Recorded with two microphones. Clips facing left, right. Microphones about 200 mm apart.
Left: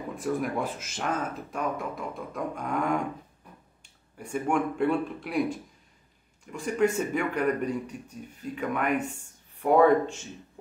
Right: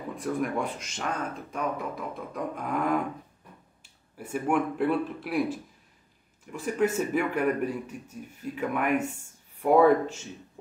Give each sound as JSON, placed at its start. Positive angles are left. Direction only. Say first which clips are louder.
{"t": 0.1, "sound": "speech", "louder": "even", "side_deg": 0}